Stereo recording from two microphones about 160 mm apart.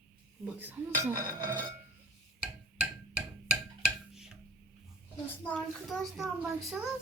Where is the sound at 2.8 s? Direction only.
10° right (ahead or behind).